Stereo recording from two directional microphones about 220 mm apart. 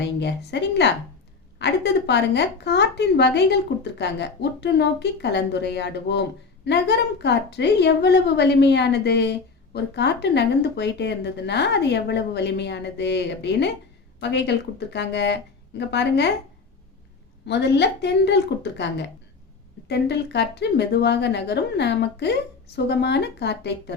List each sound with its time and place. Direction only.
0.0 s a woman's voice: 50° left (ahead or behind)
17.4 s a woman's voice: 50° left (ahead or behind)